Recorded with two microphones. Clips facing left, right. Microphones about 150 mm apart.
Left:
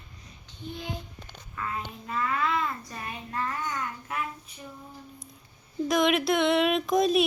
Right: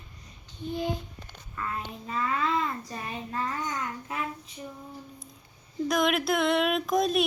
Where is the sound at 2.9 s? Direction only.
20° right (ahead or behind).